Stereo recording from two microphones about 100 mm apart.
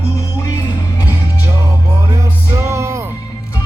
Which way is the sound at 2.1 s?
30° right (ahead or behind).